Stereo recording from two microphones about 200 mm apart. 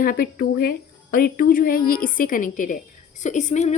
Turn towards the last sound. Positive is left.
turn(degrees=35)  # may be behind; listen again after turning